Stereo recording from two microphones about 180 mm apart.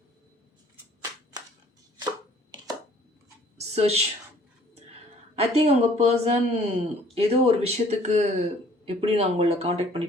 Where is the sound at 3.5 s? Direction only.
35° right (ahead or behind).